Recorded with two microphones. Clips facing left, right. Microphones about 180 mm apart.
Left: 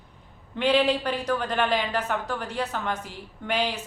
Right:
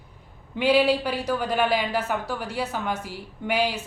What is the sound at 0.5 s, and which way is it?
A woman's voice, 10° right (ahead or behind).